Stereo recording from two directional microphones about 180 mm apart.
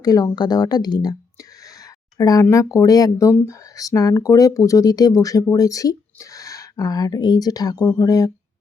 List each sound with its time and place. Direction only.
0.0 s speech: 20° left (ahead or behind)
2.1 s speech: 20° left (ahead or behind)